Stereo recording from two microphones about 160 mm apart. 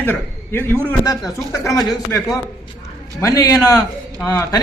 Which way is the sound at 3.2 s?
20° left (ahead or behind).